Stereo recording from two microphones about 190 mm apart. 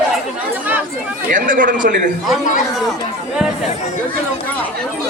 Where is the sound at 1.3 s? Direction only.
45° right (ahead or behind).